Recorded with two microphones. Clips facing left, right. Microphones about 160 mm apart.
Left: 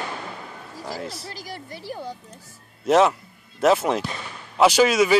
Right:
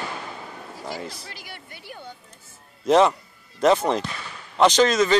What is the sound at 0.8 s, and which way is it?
Speech, 5° left (ahead or behind).